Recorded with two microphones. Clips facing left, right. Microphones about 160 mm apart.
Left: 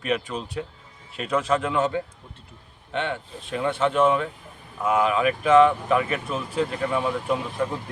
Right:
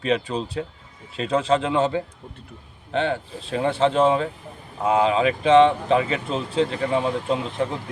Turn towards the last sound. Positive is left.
turn(degrees=-20)  # may be behind; listen again after turning